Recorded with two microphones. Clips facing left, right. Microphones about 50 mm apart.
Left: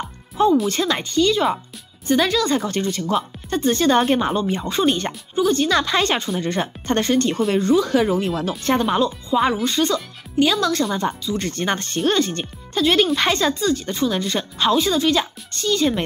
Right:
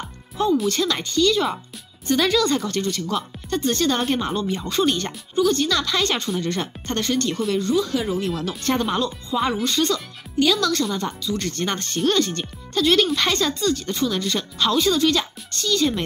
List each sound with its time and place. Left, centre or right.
0.7 s speech: centre
2.5 s speech: centre
5.7 s speech: left
6.1 s speech: centre
6.4 s speech: centre
8.2 s speech: centre